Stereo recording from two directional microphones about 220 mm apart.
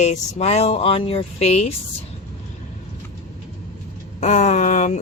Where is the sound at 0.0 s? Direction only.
30° left (ahead or behind).